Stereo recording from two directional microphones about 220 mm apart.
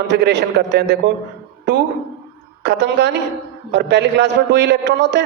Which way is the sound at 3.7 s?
50° right (ahead or behind).